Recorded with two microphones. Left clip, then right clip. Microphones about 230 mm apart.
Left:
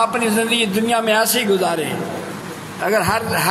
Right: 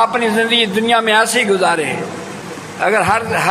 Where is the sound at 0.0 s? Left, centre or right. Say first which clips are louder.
Right 4 dB; left.